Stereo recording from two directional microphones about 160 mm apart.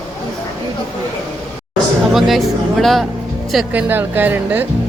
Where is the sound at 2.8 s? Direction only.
Centre (ahead or behind).